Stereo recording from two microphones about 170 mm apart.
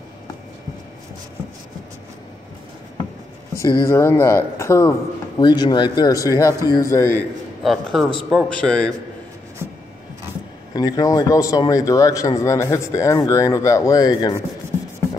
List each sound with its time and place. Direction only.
3.5 s a man's voice: 15° left (ahead or behind)
7.6 s a man's voice: centre (ahead or behind)
10.7 s a man's voice: 20° left (ahead or behind)